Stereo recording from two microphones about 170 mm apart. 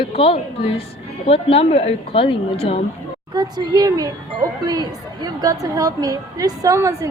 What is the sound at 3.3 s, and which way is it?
A woman's voice, 25° right (ahead or behind).